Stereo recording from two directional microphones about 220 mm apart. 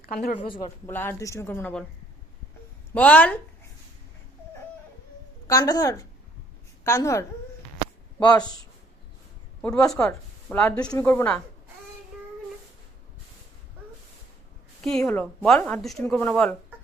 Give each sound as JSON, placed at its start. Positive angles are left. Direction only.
{"t": 0.0, "sound": "speech", "side_deg": 40}
{"t": 0.4, "sound": "a man's voice", "side_deg": 25}
{"t": 0.9, "sound": "speech", "side_deg": 10}
{"t": 2.9, "sound": "speech", "side_deg": 5}
{"t": 5.5, "sound": "a man's voice", "side_deg": 15}
{"t": 9.6, "sound": "a woman's voice", "side_deg": 5}
{"t": 14.9, "sound": "a woman's voice", "side_deg": 5}